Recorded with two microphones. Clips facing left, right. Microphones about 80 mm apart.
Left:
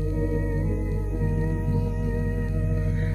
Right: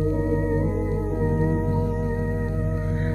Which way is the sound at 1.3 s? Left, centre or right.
Right.